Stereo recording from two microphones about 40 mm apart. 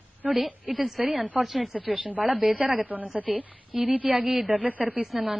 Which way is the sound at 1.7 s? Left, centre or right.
Right.